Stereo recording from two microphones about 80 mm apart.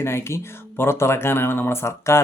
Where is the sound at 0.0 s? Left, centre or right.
Left.